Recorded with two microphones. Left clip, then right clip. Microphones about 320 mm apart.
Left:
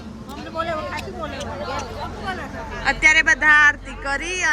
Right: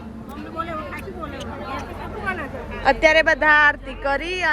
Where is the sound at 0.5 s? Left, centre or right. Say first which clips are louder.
Left 4 dB; left.